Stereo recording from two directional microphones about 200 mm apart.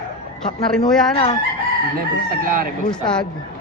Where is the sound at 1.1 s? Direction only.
30° left (ahead or behind).